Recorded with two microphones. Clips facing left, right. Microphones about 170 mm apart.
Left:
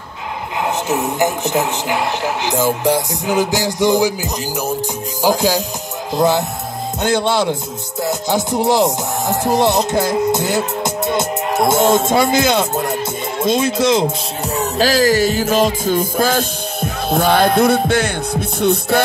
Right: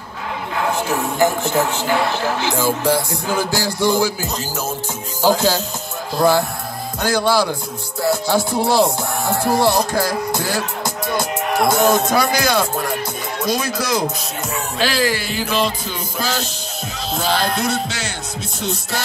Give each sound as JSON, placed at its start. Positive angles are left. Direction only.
{"t": 0.6, "sound": "speech", "side_deg": 20}
{"t": 6.1, "sound": "music", "side_deg": 20}
{"t": 14.8, "sound": "music", "side_deg": 40}